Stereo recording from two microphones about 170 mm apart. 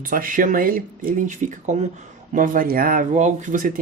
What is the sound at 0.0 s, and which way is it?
Speech, 55° right (ahead or behind).